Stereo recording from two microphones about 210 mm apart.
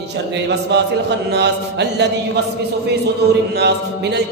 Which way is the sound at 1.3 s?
55° right (ahead or behind).